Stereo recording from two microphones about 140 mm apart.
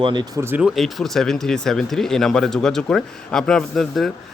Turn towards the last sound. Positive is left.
turn(degrees=0)  # may be behind; listen again after turning